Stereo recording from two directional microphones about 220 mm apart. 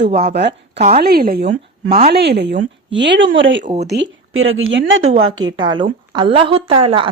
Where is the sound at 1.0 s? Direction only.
45° right (ahead or behind); by 5.1 s 60° right (ahead or behind).